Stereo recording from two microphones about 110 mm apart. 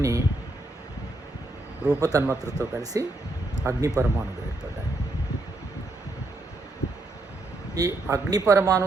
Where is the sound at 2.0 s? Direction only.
30° right (ahead or behind).